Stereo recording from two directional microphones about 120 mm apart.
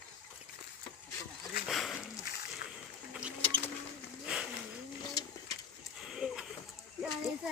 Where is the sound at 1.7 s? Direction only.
Centre (ahead or behind).